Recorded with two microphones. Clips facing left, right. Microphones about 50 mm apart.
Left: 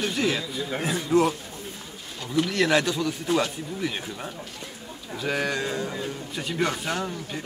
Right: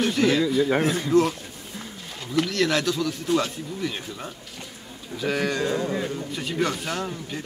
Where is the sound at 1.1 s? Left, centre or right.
Centre.